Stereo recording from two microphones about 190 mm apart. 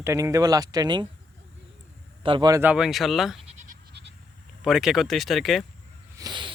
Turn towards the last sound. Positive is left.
turn(degrees=-20)  # may be behind; listen again after turning